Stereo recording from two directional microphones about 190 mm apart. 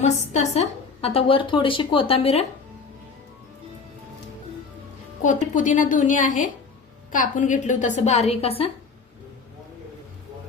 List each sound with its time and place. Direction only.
0.0 s a woman's voice: 35° left (ahead or behind)
5.2 s a woman's voice: 40° left (ahead or behind)